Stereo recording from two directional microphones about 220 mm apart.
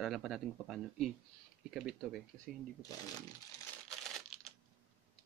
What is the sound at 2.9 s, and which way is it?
Speech, 15° left (ahead or behind).